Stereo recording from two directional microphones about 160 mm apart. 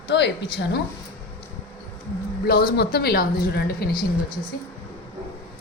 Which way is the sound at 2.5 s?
70° left (ahead or behind).